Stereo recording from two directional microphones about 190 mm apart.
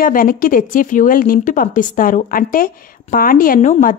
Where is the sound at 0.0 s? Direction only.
50° left (ahead or behind).